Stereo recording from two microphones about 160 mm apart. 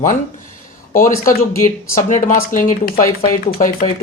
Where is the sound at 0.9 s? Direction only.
60° left (ahead or behind).